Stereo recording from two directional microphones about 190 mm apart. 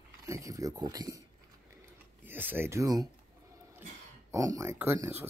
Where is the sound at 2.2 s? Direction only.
10° right (ahead or behind).